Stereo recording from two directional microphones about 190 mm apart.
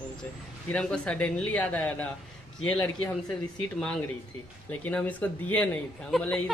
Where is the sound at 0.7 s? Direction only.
5° left (ahead or behind).